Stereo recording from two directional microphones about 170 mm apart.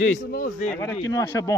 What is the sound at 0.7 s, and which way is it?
Speech, 10° left (ahead or behind).